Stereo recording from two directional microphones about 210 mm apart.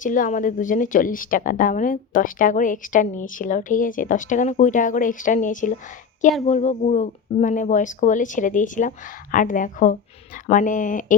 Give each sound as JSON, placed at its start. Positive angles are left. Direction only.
{"t": 0.0, "sound": "a woman's voice", "side_deg": 40}